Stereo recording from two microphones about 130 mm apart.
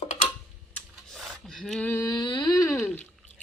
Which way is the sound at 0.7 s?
5° left (ahead or behind).